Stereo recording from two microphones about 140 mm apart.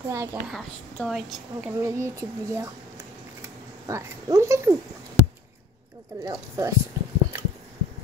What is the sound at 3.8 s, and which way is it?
Child singing, 20° right (ahead or behind).